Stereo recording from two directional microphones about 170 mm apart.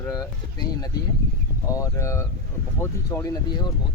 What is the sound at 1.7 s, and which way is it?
Speech, 20° left (ahead or behind).